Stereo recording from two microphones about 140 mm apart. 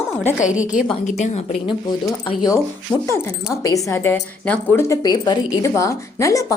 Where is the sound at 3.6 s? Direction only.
25° left (ahead or behind).